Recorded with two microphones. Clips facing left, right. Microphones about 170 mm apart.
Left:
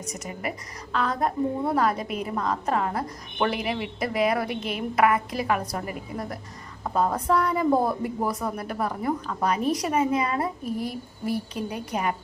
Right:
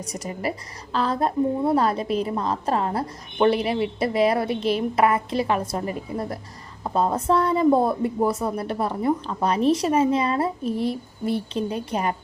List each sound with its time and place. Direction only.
0.0 s a woman's voice: 35° right (ahead or behind)